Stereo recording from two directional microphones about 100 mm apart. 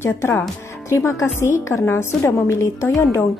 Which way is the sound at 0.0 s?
25° left (ahead or behind).